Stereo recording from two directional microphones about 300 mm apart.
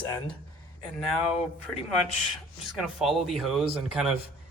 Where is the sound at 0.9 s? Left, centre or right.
Centre.